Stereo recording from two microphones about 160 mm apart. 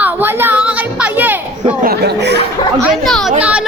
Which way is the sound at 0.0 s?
15° right (ahead or behind).